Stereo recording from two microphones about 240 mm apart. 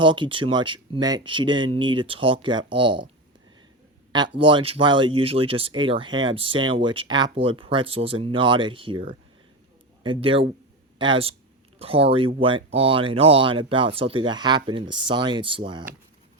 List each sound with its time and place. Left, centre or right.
0.0 s speech: centre
4.4 s speech: centre